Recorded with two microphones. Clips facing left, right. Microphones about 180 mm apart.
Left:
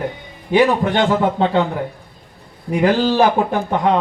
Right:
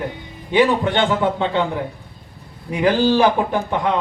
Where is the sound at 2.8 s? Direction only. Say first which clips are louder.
Even; 45° left (ahead or behind).